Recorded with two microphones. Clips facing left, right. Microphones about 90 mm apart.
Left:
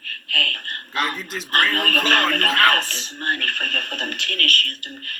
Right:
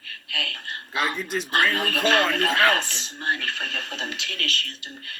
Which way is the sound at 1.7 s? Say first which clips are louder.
Left 1 dB; 55° left (ahead or behind).